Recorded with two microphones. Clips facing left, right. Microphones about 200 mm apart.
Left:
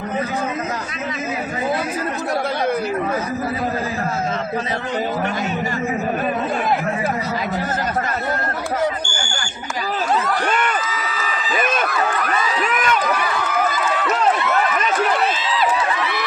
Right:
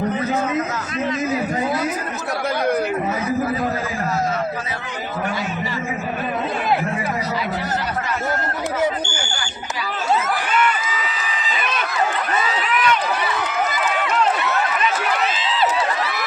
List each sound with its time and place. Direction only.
10.5 s crowd: 45° left (ahead or behind)
11.6 s run: 50° left (ahead or behind)